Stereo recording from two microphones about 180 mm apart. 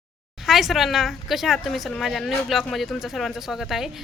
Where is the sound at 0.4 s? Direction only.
Centre (ahead or behind).